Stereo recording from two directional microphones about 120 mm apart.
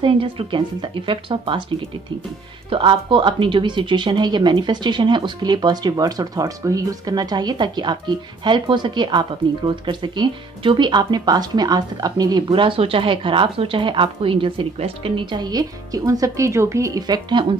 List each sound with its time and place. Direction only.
0.0 s speech: 45° right (ahead or behind)
2.7 s speech: 45° right (ahead or behind)